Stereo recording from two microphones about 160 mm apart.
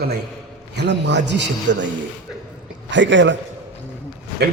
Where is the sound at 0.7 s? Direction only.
90° right.